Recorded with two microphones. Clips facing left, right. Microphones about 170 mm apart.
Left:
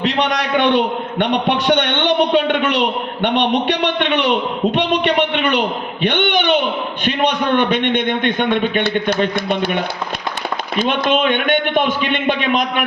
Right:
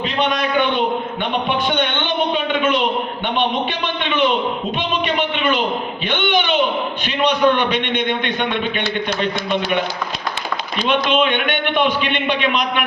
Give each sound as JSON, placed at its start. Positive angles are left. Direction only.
{"t": 0.0, "sound": "a sound", "side_deg": 80}
{"t": 1.2, "sound": "a man's voice", "side_deg": 75}
{"t": 10.8, "sound": "a man's voice", "side_deg": 50}